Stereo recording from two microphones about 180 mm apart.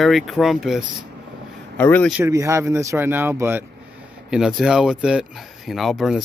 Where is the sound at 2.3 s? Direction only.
15° right (ahead or behind).